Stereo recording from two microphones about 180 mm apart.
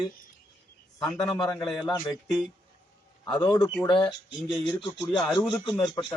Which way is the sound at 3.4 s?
20° left (ahead or behind).